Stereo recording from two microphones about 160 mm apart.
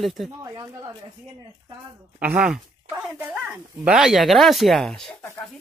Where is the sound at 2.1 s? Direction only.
10° right (ahead or behind).